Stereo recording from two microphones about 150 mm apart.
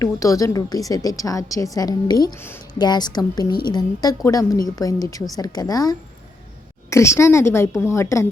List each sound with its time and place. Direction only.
0.0 s a woman's voice: 20° left (ahead or behind)